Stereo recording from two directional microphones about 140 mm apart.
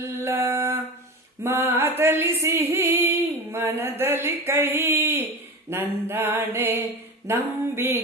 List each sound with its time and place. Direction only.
0.0 s a sound: 15° right (ahead or behind)
5.6 s mantra: 15° right (ahead or behind)
7.3 s music: 20° right (ahead or behind)
7.8 s mantra: 15° right (ahead or behind)